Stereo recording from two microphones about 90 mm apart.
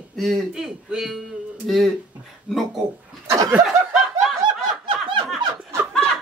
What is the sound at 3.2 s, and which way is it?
Laughter, 40° right (ahead or behind).